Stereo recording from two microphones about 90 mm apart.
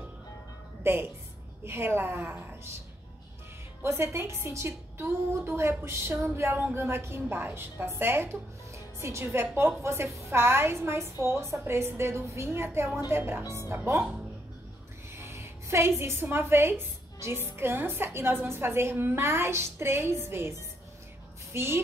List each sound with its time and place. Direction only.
0.8 s a woman's voice: 25° right (ahead or behind)
3.8 s a woman's voice: 30° right (ahead or behind)
15.1 s a sound: 30° right (ahead or behind)
16.0 s a woman's voice: 25° right (ahead or behind)
21.5 s a woman's voice: 30° right (ahead or behind)